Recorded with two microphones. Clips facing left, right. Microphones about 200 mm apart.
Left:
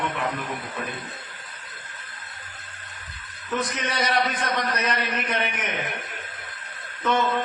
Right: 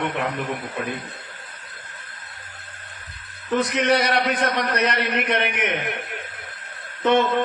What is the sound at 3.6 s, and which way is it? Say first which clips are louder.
A man's voice: right 9 dB; 65° right (ahead or behind).